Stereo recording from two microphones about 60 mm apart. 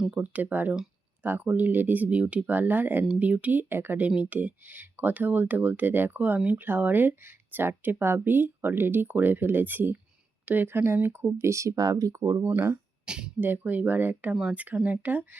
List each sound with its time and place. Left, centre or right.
0.1 s speech: right
11.8 s speech: right
12.4 s speech: right
13.1 s speech: centre
13.4 s speech: right